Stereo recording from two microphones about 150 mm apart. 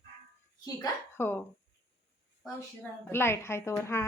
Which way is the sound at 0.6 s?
20° left (ahead or behind).